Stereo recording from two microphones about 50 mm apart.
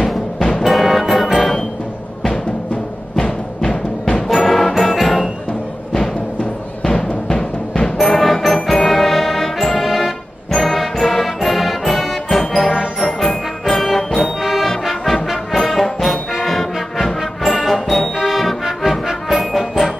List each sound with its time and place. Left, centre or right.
0.5 s music: centre
4.0 s music: centre
6.8 s timpani: centre
8.0 s music: centre
14.7 s brass instrument: centre
17.6 s music: centre